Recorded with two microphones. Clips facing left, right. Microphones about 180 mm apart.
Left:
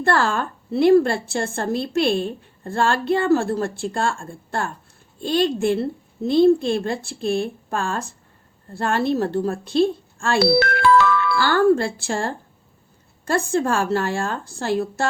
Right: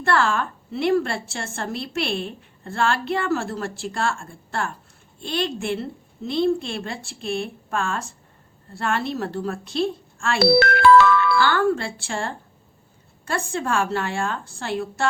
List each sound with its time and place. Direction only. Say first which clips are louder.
0.1 s a woman's voice: even; 35° left (ahead or behind)
10.6 s music: right 2 dB; 70° right (ahead or behind)
11.3 s a woman's voice: left 3 dB; 40° left (ahead or behind)